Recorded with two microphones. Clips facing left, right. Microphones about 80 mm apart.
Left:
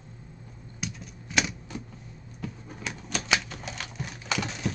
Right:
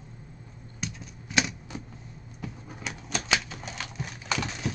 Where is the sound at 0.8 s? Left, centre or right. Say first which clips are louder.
Even; centre.